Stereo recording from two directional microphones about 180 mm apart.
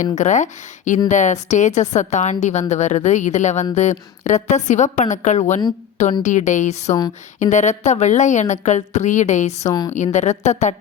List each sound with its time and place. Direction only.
0.2 s a woman's voice: 40° left (ahead or behind)
9.6 s speech: 20° left (ahead or behind)
9.9 s a woman's voice: 40° left (ahead or behind)